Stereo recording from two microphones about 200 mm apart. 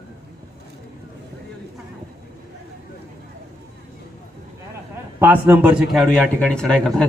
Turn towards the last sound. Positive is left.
turn(degrees=5)  # may be behind; listen again after turning